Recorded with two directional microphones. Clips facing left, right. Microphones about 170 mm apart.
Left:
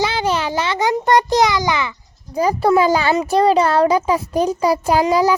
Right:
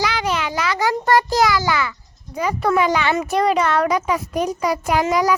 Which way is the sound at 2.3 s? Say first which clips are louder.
Left 4 dB; 35° left (ahead or behind).